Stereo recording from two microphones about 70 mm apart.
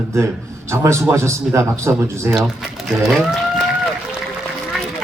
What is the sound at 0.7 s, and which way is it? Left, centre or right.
A man's voice, right.